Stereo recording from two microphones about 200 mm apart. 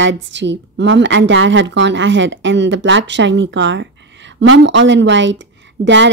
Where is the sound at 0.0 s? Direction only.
60° right (ahead or behind).